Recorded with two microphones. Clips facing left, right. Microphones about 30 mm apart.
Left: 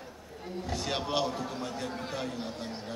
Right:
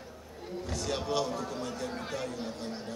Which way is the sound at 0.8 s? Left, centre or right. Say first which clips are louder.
Left 1 dB; left.